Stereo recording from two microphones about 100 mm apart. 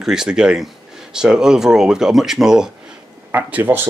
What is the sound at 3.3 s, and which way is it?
Speech, 20° right (ahead or behind).